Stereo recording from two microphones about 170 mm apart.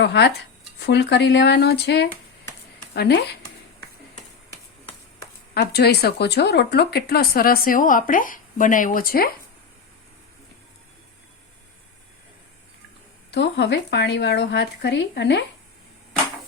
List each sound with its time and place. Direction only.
0.0 s speech: 80° left
0.8 s speech: 90° left; by 3.2 s 70° left (ahead or behind)
5.5 s speech: 75° left (ahead or behind)
13.3 s speech: 90° left